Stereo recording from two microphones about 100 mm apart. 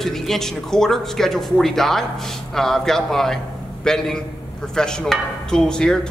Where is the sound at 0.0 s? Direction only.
5° left (ahead or behind).